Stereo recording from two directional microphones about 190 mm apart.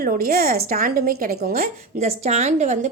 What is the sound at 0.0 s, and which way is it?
A woman's voice, 50° right (ahead or behind).